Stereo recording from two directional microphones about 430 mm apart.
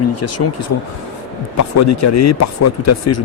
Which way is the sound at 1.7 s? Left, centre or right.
Left.